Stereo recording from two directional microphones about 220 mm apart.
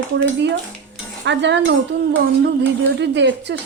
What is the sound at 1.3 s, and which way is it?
A woman's voice, 55° right (ahead or behind).